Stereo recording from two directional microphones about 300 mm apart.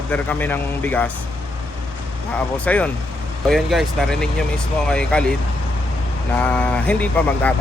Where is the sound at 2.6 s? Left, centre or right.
Centre.